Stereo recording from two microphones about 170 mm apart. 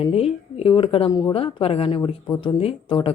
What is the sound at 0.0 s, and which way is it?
Speech, 35° left (ahead or behind).